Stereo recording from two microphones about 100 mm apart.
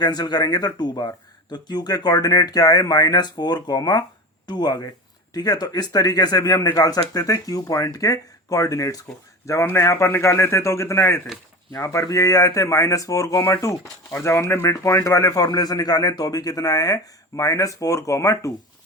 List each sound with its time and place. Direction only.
0.0 s a man's voice: 45° left (ahead or behind)